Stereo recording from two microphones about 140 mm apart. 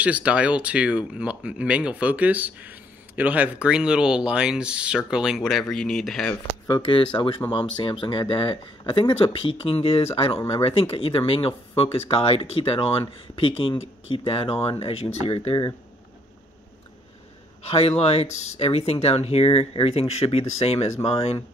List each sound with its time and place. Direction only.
0.0 s speech: 10° right (ahead or behind)
7.2 s speech: 35° left (ahead or behind)
17.6 s speech: 45° left (ahead or behind)